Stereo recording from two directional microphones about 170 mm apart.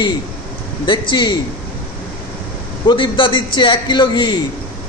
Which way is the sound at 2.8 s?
30° left (ahead or behind).